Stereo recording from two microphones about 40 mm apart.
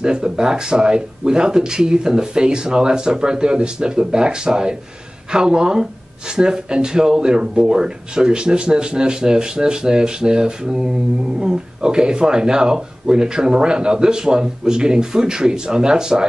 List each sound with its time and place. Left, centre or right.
0.0 s speech: right